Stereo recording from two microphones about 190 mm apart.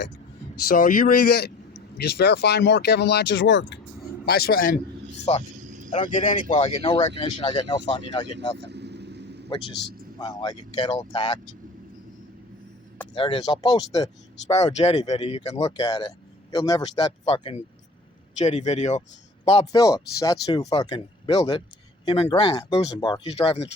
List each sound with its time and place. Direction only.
0.7 s speech: 50° left (ahead or behind); by 3.8 s 70° left (ahead or behind)
4.3 s speech: 55° left (ahead or behind)
5.5 s vehicle: 40° right (ahead or behind)
5.9 s speech: 35° left (ahead or behind)
8.5 s vehicle: 65° right (ahead or behind)
9.5 s speech: 25° left (ahead or behind)
13.1 s speech: 25° left (ahead or behind)
14.6 s speech: 35° left (ahead or behind)
15.6 s speech: 20° left (ahead or behind)
18.3 s speech: 40° left (ahead or behind)
19.7 s speech: 20° left (ahead or behind)